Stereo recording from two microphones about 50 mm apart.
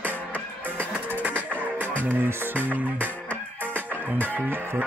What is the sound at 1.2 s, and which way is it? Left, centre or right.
Music, right.